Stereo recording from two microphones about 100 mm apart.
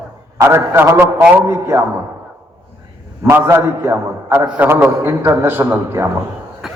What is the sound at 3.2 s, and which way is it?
A man's voice, 25° right (ahead or behind).